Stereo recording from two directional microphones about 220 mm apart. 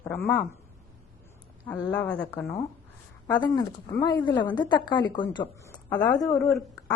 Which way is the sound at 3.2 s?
20° left (ahead or behind).